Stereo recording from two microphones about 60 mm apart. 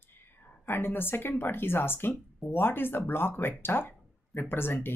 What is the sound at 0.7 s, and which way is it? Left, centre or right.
Speech, left.